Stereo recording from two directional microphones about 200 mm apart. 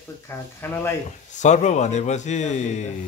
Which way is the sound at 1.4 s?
35° left (ahead or behind).